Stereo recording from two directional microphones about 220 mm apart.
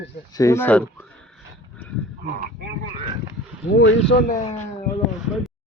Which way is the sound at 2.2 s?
40° right (ahead or behind).